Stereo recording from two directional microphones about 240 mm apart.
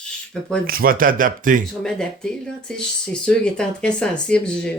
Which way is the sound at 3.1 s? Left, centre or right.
Centre.